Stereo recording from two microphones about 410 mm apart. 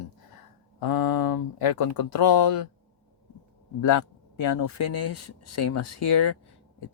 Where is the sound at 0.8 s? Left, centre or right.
Left.